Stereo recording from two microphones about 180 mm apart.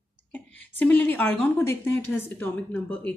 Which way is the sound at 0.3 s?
10° left (ahead or behind).